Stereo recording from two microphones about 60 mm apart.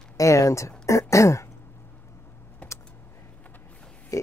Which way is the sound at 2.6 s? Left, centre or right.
Left.